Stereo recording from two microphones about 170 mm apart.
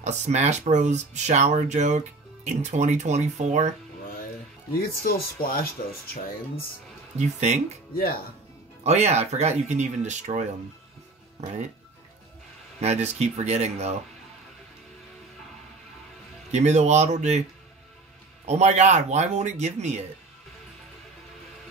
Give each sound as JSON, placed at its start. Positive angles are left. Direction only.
{"t": 0.0, "sound": "speech", "side_deg": -40}
{"t": 4.7, "sound": "speech", "side_deg": 60}
{"t": 7.2, "sound": "speech", "side_deg": -40}
{"t": 8.8, "sound": "speech", "side_deg": -40}
{"t": 12.8, "sound": "speech", "side_deg": -40}
{"t": 16.5, "sound": "speech", "side_deg": -40}
{"t": 18.5, "sound": "speech", "side_deg": -40}